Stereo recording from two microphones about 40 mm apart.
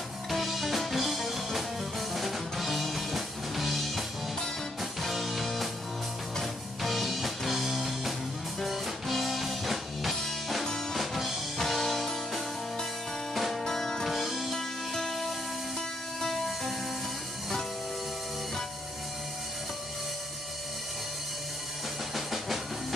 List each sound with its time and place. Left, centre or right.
0.3 s music: centre
5.0 s music: centre
10.6 s music: centre
11.0 s music: centre
13.3 s music: centre
14.1 s music: centre
15.0 s music: centre
22.1 s a sound: centre